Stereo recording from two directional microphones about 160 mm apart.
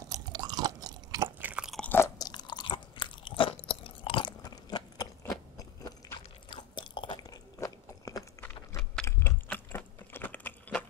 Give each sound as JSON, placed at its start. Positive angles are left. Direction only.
{"t": 0.1, "sound": "chewing", "side_deg": -25}
{"t": 1.4, "sound": "chewing", "side_deg": -5}
{"t": 1.8, "sound": "crunch", "side_deg": 10}
{"t": 2.1, "sound": "biting", "side_deg": 25}
{"t": 9.0, "sound": "typing", "side_deg": 15}